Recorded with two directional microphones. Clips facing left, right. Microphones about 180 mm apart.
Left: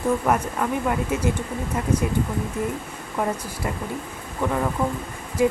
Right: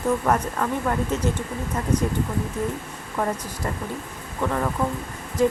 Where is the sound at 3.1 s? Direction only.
10° left (ahead or behind).